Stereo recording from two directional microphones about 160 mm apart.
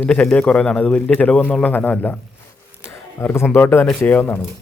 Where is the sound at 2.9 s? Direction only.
15° left (ahead or behind).